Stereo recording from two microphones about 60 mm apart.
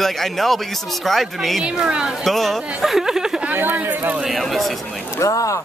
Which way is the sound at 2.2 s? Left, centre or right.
Centre.